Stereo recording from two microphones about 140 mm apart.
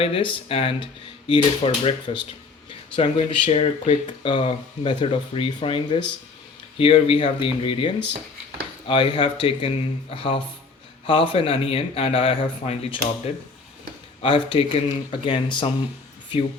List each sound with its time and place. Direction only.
0.0 s speech: 40° left (ahead or behind)
8.9 s speech: 40° left (ahead or behind)